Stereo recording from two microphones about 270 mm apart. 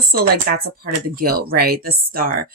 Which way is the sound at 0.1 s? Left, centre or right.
Right.